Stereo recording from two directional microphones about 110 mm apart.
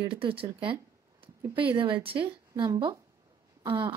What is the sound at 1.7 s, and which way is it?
Speech, 55° right (ahead or behind).